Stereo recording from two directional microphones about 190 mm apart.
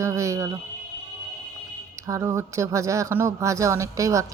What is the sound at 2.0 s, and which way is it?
Speech, 15° right (ahead or behind).